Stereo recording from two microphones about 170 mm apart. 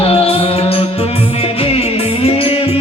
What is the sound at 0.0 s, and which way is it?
Music, 35° left (ahead or behind).